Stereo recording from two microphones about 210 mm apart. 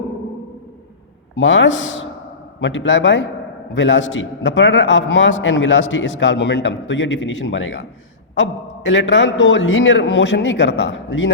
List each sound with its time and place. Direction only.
1.4 s a man's voice: 60° left (ahead or behind)